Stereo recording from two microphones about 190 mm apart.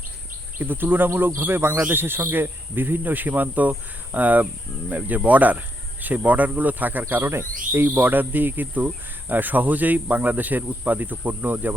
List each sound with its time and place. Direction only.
0.6 s speech: 10° right (ahead or behind)